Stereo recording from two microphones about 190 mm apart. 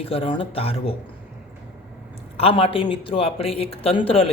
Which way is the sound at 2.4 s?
30° left (ahead or behind).